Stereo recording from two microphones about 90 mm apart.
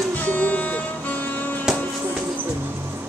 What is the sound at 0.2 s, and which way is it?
Music, 20° left (ahead or behind).